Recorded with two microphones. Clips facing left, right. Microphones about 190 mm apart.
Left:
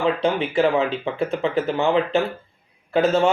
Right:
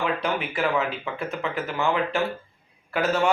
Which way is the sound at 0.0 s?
30° left (ahead or behind).